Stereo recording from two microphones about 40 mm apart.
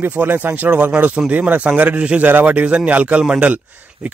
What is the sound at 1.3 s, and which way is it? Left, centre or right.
A man's voice, right.